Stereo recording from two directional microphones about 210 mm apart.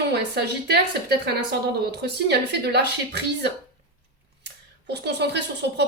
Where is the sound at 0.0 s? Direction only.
50° right (ahead or behind).